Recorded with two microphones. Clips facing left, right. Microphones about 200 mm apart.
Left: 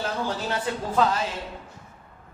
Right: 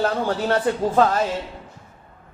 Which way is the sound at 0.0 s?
55° right (ahead or behind).